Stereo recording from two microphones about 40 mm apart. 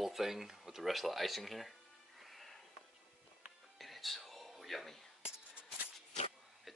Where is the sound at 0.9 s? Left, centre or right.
Centre.